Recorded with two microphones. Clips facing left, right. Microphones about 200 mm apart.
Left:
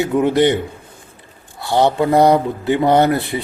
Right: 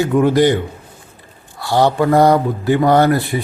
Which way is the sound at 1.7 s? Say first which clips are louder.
Right 1 dB; 20° left (ahead or behind).